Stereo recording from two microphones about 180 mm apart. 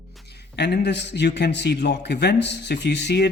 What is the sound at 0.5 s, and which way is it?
A man's voice, 70° left (ahead or behind).